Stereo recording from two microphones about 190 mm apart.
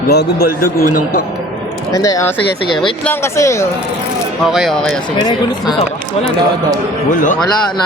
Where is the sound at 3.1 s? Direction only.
15° left (ahead or behind).